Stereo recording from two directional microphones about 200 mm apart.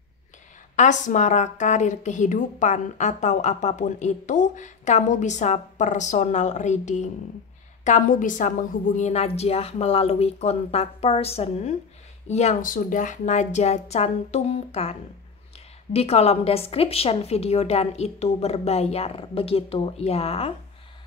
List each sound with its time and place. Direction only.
0.7 s a woman's voice: 35° left (ahead or behind)